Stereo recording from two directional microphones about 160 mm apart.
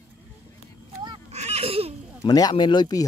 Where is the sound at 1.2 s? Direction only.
40° right (ahead or behind).